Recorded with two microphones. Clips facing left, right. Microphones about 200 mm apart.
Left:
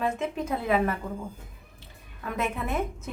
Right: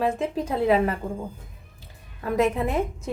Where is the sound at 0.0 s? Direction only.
30° right (ahead or behind).